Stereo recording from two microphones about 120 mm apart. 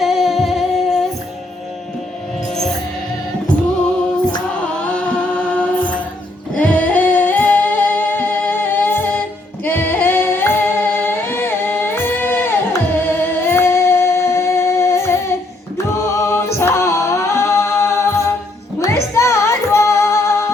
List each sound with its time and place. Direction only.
0.0 s music: centre (ahead or behind)
4.9 s music: 10° left (ahead or behind)
6.5 s singing: 10° left (ahead or behind)
13.0 s music: 20° left (ahead or behind)